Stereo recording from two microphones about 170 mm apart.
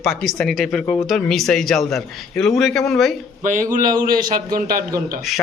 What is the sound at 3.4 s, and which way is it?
A man's voice, 50° right (ahead or behind).